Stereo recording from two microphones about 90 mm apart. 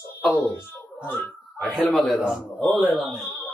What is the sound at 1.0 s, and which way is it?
Speech, 25° left (ahead or behind).